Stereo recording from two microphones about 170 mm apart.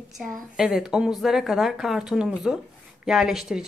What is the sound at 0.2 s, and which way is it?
A woman's voice, 5° right (ahead or behind).